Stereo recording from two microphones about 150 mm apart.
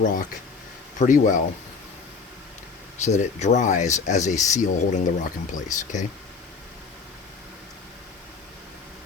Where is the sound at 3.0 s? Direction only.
50° left (ahead or behind).